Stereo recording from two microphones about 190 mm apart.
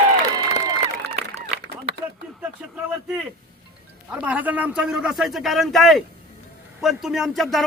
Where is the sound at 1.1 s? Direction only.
35° right (ahead or behind).